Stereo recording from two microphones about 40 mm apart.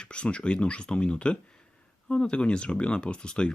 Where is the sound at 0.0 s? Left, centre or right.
Left.